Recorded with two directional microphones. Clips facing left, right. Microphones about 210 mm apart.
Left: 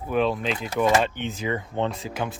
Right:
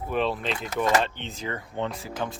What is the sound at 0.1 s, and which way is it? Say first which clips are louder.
Speech: left 4 dB; centre (ahead or behind).